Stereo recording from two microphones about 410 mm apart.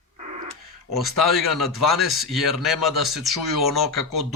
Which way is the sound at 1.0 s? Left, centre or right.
Centre.